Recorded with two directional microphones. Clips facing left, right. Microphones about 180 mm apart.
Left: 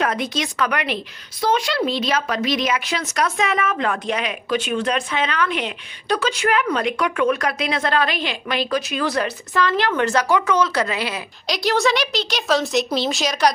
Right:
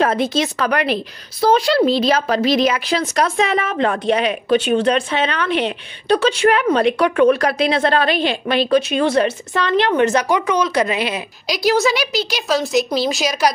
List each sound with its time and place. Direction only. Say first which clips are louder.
0.0 s a woman's voice: right 5 dB; 30° right (ahead or behind)
11.4 s speech: right 3 dB; 5° right (ahead or behind)